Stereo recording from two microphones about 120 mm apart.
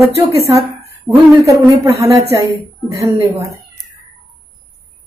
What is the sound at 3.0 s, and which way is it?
Speech, 25° right (ahead or behind).